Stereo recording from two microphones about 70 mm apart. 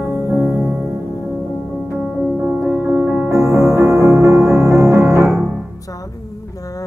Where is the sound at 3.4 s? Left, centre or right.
Right.